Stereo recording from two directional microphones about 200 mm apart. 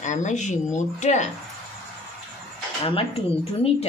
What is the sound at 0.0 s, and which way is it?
Speech, 35° left (ahead or behind).